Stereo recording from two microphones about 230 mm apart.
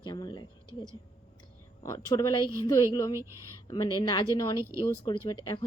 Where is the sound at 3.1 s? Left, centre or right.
Centre.